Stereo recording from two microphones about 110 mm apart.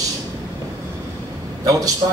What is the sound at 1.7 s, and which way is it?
Speech, 30° right (ahead or behind).